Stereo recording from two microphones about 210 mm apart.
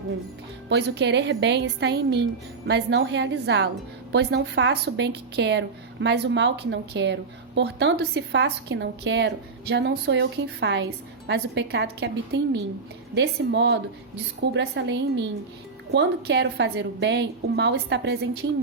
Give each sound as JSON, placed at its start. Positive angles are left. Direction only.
{"t": 0.7, "sound": "a woman's voice", "side_deg": -55}